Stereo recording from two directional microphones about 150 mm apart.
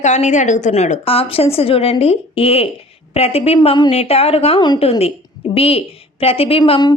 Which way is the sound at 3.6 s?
30° left (ahead or behind).